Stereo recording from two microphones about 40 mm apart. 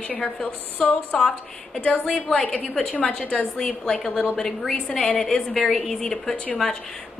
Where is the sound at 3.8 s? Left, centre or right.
Centre.